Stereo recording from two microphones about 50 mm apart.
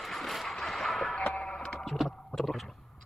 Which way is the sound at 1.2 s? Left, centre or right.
Left.